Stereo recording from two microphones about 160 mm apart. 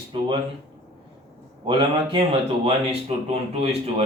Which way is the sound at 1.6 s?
30° right (ahead or behind).